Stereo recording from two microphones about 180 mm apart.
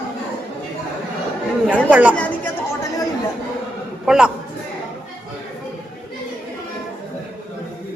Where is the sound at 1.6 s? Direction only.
10° right (ahead or behind).